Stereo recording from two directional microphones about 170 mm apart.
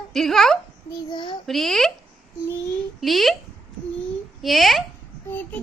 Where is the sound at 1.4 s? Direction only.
Centre (ahead or behind).